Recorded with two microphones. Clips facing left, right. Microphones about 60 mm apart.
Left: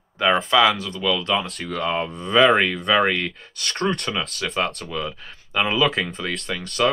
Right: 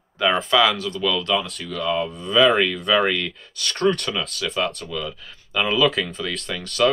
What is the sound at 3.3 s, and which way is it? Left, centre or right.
Speech, left.